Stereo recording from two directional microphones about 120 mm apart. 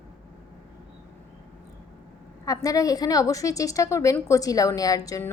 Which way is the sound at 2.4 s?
30° left (ahead or behind).